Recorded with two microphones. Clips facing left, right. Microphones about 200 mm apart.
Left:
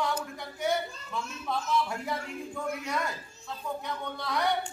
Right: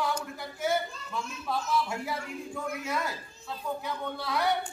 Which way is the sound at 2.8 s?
5° right (ahead or behind).